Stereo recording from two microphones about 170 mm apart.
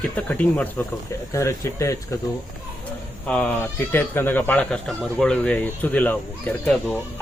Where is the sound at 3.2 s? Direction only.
10° left (ahead or behind).